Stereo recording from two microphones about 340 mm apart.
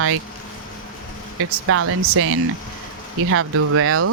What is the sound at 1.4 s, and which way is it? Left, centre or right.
Speech, right.